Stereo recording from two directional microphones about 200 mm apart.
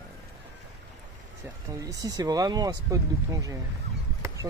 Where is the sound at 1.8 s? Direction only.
20° right (ahead or behind).